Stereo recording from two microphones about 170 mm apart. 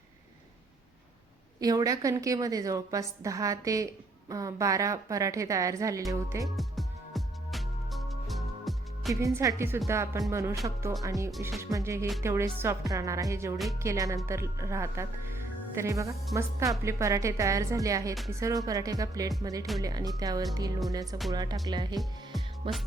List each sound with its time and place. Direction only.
1.5 s a woman's voice: 20° right (ahead or behind)
6.4 s music: centre (ahead or behind)
9.2 s a woman's voice: 20° right (ahead or behind)